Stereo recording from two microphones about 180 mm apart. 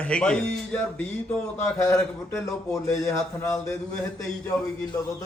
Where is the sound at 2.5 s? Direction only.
15° left (ahead or behind).